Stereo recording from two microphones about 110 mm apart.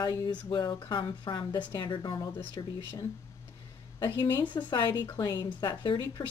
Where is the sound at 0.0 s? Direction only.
40° left (ahead or behind).